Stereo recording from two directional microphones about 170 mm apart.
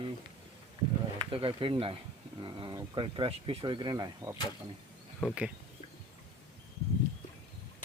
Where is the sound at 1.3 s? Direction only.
30° right (ahead or behind).